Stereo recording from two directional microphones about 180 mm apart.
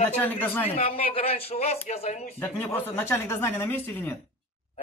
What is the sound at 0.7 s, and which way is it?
Speech, 35° left (ahead or behind).